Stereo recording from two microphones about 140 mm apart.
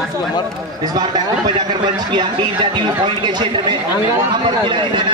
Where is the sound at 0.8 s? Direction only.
30° right (ahead or behind).